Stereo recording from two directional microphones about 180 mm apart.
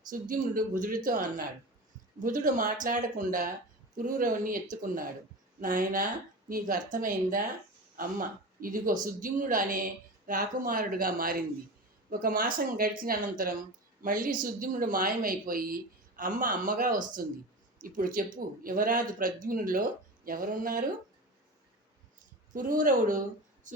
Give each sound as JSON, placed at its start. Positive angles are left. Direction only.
{"t": 0.1, "sound": "speech", "side_deg": -50}
{"t": 8.6, "sound": "speech", "side_deg": -50}
{"t": 22.5, "sound": "speech", "side_deg": -50}